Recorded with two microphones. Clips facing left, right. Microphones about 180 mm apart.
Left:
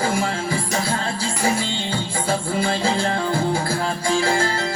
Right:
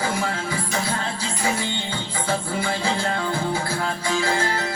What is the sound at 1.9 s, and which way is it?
Music, 10° left (ahead or behind).